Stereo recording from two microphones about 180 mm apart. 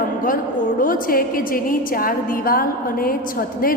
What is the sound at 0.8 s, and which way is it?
A woman's voice, 50° left (ahead or behind).